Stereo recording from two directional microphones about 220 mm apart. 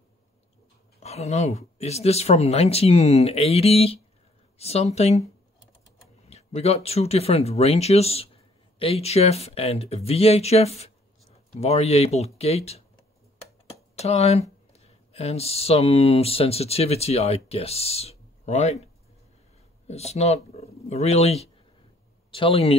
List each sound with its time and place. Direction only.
1.0 s speech: 30° left (ahead or behind)
13.9 s speech: 30° left (ahead or behind)
19.9 s speech: 30° left (ahead or behind)